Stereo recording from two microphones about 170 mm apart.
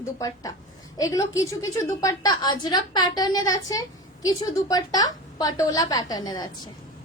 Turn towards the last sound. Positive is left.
turn(degrees=25)  # may be behind; listen again after turning